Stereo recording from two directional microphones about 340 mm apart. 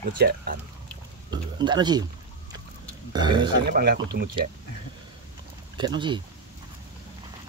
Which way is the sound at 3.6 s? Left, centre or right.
Right.